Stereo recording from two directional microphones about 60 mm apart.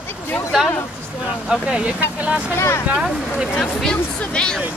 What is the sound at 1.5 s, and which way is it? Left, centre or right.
Speech, centre.